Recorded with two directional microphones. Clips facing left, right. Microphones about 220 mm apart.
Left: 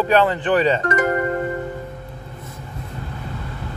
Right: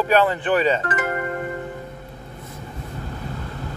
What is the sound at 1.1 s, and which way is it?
Music, 35° left (ahead or behind).